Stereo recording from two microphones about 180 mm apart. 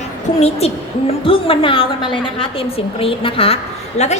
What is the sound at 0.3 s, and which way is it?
A woman's voice, 35° left (ahead or behind).